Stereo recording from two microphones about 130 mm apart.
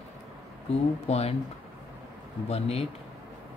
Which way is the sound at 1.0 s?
55° left (ahead or behind).